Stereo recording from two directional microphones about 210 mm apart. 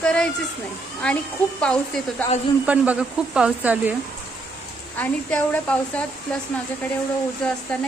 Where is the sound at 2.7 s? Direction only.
10° right (ahead or behind).